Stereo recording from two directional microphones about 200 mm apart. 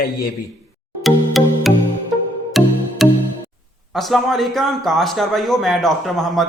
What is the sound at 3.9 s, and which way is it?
A man's voice, centre (ahead or behind).